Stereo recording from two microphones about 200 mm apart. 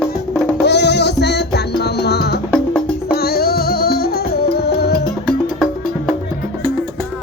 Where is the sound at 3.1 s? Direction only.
50° left (ahead or behind).